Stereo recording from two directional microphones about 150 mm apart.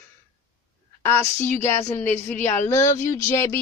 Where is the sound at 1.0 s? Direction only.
15° left (ahead or behind).